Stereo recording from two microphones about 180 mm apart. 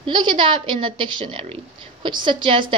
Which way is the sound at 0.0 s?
25° right (ahead or behind).